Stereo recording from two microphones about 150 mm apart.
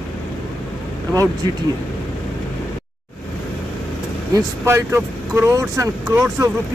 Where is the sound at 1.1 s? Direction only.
25° right (ahead or behind).